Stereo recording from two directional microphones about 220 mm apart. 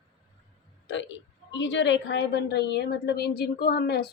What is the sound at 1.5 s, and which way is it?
A woman's voice, 55° left (ahead or behind).